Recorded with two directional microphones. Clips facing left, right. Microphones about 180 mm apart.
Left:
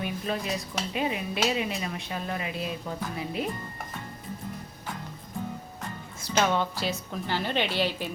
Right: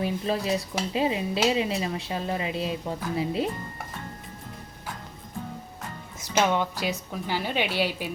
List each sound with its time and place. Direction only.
0.0 s speech: 30° right (ahead or behind)
6.1 s a woman's voice: 15° right (ahead or behind)